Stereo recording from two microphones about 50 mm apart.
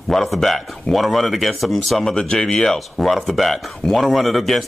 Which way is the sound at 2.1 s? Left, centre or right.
Centre.